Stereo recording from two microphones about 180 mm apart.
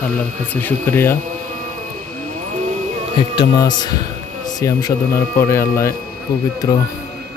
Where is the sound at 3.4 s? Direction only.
20° left (ahead or behind).